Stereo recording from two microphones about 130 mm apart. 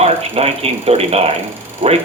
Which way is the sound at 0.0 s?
55° right (ahead or behind).